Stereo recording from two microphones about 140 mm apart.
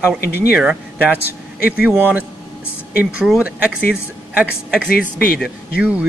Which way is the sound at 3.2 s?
5° right (ahead or behind).